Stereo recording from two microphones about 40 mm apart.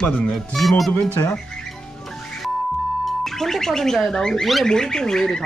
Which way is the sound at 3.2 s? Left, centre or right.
Centre.